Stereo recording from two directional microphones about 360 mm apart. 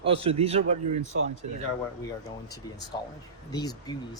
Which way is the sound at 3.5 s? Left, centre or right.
Centre.